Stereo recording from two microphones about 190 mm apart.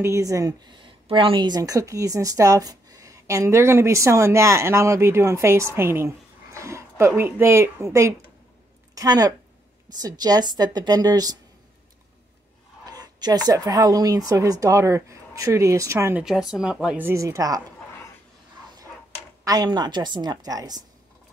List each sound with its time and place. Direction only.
0.0 s a woman's voice: 15° right (ahead or behind)
12.9 s speech: 20° right (ahead or behind)
19.4 s a woman's voice: 20° right (ahead or behind)